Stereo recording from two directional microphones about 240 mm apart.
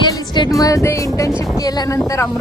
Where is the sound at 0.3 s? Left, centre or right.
Centre.